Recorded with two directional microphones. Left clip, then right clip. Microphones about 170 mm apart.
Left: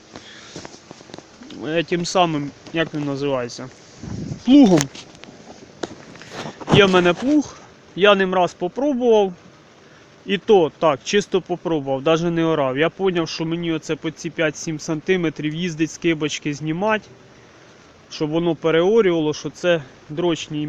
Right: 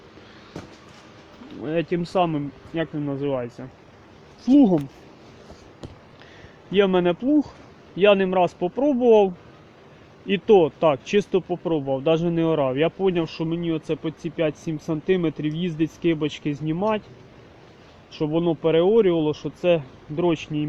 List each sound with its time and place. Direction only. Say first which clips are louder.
1.6 s speech: left 3 dB; centre (ahead or behind); by 4.8 s 20° left (ahead or behind)
6.7 s speech: left 5 dB; 15° left (ahead or behind)
18.1 s speech: left 2 dB; 5° left (ahead or behind)